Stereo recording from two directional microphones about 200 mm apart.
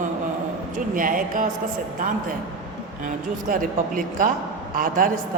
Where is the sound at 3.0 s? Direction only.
45° right (ahead or behind).